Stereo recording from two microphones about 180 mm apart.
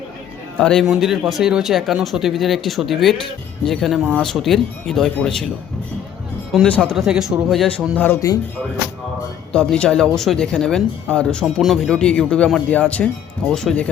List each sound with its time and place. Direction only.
0.6 s speech: 5° left (ahead or behind)
6.5 s speech: 5° left (ahead or behind)
9.5 s speech: 5° left (ahead or behind)